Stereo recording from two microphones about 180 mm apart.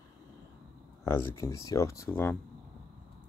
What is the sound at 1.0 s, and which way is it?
Speech, 15° left (ahead or behind).